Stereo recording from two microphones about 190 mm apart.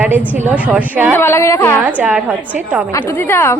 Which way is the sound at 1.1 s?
10° left (ahead or behind).